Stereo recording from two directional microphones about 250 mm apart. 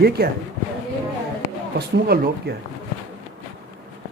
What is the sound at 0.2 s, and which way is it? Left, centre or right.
Speech, right.